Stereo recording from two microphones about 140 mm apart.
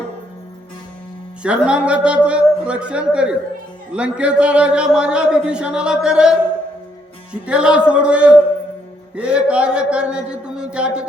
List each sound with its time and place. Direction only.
1.4 s speech: 5° right (ahead or behind)
7.4 s speech: 5° right (ahead or behind)